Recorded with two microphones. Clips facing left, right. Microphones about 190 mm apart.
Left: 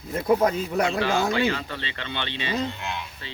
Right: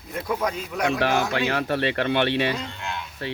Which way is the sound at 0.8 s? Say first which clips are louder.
Right 2 dB; 70° right (ahead or behind).